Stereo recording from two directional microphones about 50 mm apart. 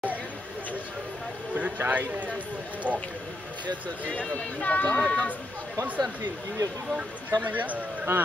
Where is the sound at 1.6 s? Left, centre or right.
Right.